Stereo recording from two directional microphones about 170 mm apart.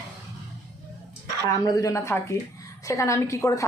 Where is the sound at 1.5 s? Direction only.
20° left (ahead or behind).